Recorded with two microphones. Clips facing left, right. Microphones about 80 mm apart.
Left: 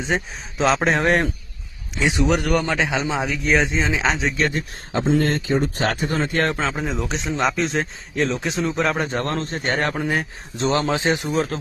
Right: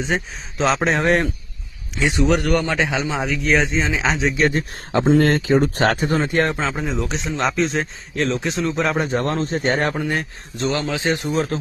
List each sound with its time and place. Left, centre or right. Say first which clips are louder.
0.0 s speech: right 1 dB; centre
4.9 s speech: right 4 dB; right
6.1 s speech: right 3 dB; centre
6.4 s speech: right 1 dB; centre
9.4 s speech: right 3 dB; centre
9.9 s speech: even; centre
10.6 s a man's voice: left 2 dB; left
11.1 s speech: right 1 dB; centre